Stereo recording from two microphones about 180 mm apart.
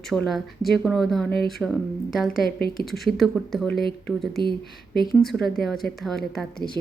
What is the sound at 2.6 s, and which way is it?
Speech, 60° left (ahead or behind).